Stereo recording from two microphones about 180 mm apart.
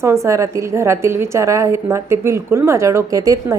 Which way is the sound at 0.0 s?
15° right (ahead or behind).